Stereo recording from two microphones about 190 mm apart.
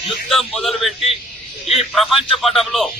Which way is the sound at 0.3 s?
Centre (ahead or behind).